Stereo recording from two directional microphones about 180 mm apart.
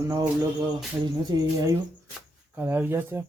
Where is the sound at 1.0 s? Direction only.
20° right (ahead or behind).